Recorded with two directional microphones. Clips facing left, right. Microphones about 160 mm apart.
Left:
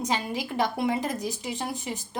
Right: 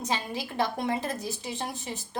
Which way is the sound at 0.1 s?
15° left (ahead or behind).